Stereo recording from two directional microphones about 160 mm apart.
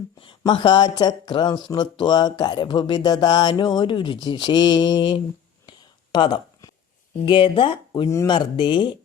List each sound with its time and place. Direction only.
0.2 s speech: 35° left (ahead or behind)
5.6 s a sound: 30° left (ahead or behind)
7.3 s speech: 30° left (ahead or behind)